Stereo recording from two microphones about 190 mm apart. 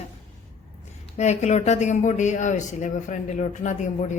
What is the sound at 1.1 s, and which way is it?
Speech, 35° left (ahead or behind).